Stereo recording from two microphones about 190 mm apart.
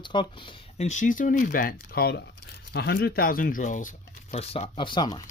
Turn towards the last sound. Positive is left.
turn(degrees=20)  # may be behind; listen again after turning